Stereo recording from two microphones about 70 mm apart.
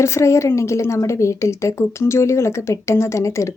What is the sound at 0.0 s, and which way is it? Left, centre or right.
A woman's voice, left.